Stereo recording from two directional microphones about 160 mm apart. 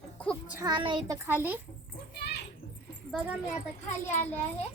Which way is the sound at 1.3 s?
10° right (ahead or behind).